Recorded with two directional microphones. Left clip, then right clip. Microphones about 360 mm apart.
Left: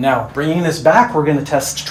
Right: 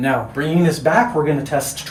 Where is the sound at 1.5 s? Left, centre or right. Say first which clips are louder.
Left 4 dB; centre.